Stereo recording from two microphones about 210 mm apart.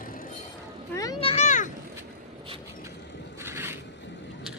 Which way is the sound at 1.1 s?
30° left (ahead or behind).